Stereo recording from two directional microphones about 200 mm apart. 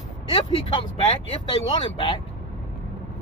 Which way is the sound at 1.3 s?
20° left (ahead or behind).